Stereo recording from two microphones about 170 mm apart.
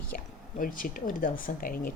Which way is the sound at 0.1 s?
50° left (ahead or behind).